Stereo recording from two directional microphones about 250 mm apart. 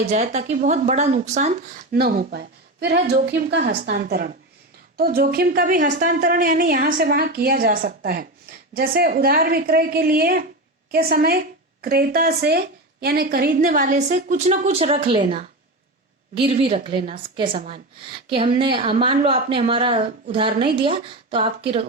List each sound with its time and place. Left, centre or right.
0.1 s a woman's voice: right
16.3 s speech: right